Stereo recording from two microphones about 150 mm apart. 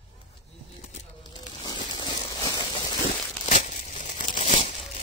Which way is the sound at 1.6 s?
30° left (ahead or behind).